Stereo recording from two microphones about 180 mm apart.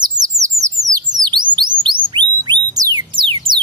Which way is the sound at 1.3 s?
25° right (ahead or behind).